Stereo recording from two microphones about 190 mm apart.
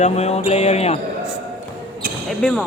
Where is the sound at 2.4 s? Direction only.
5° left (ahead or behind).